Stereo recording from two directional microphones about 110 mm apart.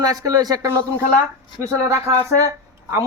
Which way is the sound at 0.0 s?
35° right (ahead or behind).